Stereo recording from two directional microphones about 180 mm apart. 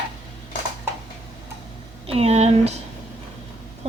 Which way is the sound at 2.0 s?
35° right (ahead or behind).